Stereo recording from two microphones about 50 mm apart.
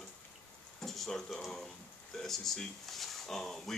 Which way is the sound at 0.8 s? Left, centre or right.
Centre.